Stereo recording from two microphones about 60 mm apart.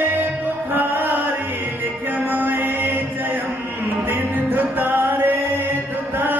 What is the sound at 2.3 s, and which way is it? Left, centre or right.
Music, right.